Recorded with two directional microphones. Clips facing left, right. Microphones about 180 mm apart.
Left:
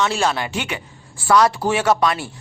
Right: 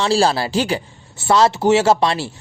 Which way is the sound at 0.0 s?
30° right (ahead or behind).